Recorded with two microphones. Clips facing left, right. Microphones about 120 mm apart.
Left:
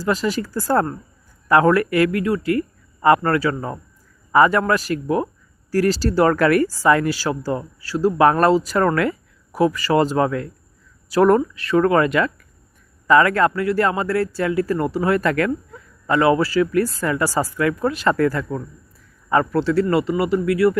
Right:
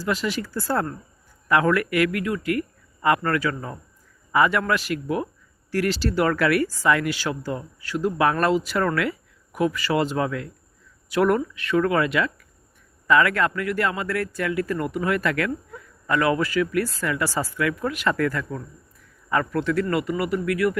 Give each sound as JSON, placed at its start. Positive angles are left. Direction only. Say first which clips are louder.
{"t": 0.0, "sound": "speech", "louder": "left 4 dB", "side_deg": 40}
{"t": 16.0, "sound": "speech", "louder": "left 5 dB", "side_deg": 30}